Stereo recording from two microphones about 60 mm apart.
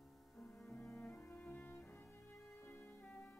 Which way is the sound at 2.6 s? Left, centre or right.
Left.